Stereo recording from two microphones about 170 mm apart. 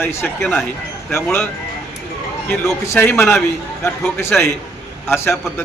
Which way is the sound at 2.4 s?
15° left (ahead or behind).